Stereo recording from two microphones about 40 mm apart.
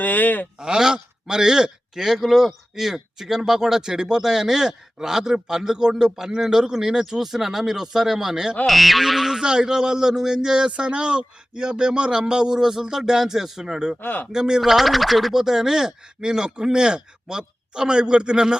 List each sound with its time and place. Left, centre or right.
0.0 s speech: left
0.6 s a man's voice: centre
8.6 s a sound: centre
9.4 s a man's voice: centre
14.0 s a man's voice: left
14.3 s a man's voice: centre
14.6 s a man's voice: centre